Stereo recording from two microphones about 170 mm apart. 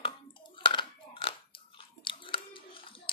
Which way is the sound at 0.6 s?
30° left (ahead or behind).